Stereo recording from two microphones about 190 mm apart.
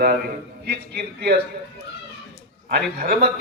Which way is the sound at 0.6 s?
55° right (ahead or behind).